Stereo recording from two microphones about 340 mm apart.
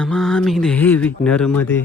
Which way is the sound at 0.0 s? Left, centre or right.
Centre.